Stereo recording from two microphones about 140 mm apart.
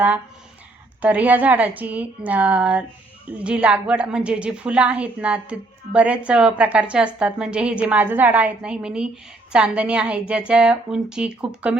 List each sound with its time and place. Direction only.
1.0 s a woman's voice: 10° right (ahead or behind)